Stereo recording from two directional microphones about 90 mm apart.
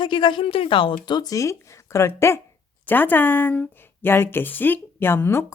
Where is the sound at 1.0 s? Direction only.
55° left (ahead or behind).